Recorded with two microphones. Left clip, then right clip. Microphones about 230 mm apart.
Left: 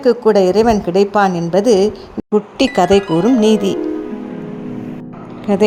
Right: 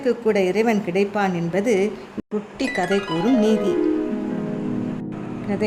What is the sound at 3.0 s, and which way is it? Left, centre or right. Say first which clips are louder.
Music: left 7 dB; centre.